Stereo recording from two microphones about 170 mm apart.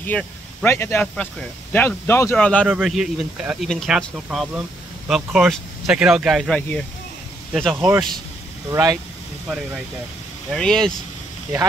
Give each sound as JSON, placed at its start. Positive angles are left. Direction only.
{"t": 0.0, "sound": "speech", "side_deg": 5}
{"t": 2.3, "sound": "speech", "side_deg": 5}
{"t": 7.7, "sound": "speech", "side_deg": -10}
{"t": 10.5, "sound": "speech", "side_deg": 5}